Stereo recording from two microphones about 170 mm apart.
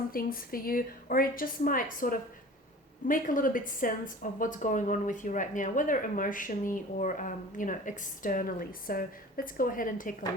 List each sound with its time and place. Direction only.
0.1 s a woman's voice: 60° left (ahead or behind)